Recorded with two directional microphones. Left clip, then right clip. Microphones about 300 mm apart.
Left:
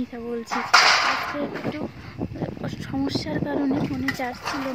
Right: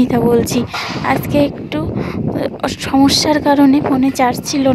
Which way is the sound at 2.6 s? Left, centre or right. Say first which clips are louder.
Right 17 dB; right.